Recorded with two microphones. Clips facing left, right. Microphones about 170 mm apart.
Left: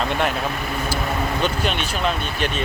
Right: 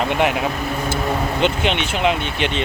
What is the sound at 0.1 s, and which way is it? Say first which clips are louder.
Speech: right 4 dB; 15° right (ahead or behind).